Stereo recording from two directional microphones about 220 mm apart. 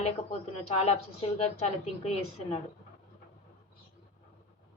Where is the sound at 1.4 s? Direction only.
30° left (ahead or behind).